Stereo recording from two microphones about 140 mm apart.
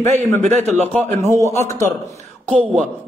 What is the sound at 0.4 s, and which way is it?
Speech, 55° right (ahead or behind).